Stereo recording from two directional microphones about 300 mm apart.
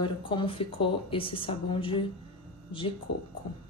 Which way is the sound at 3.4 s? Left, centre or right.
Centre.